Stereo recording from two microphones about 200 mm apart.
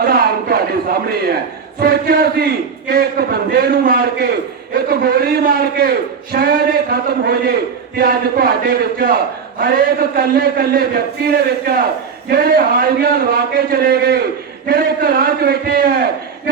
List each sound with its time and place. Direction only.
0.0 s speech: 50° right (ahead or behind)
6.3 s speech: 50° right (ahead or behind)